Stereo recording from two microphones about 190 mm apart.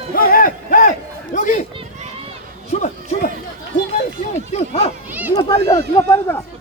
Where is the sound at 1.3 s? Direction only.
45° left (ahead or behind).